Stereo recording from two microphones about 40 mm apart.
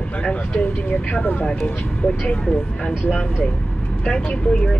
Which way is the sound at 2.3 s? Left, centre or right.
Left.